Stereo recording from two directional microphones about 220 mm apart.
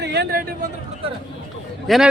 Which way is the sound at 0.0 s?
50° right (ahead or behind).